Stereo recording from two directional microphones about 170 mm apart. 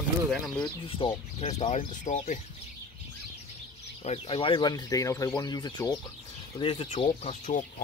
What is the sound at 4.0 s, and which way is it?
Speech, 35° left (ahead or behind).